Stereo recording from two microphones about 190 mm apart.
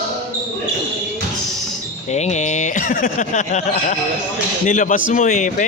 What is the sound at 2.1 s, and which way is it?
Speech, 35° left (ahead or behind).